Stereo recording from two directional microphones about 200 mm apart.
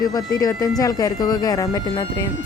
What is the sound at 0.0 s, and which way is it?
Speech, 20° left (ahead or behind).